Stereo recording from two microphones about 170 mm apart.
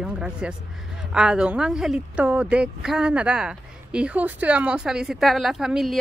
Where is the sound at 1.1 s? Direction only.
5° right (ahead or behind).